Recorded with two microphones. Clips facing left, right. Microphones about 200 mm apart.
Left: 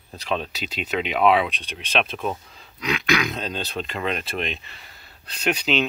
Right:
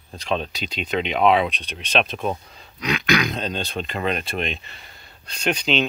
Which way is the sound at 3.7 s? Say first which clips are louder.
Right 2 dB; 40° right (ahead or behind).